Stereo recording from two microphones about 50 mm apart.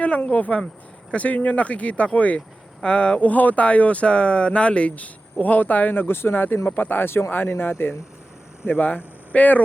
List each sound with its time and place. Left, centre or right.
0.0 s speech: left
7.3 s speech: left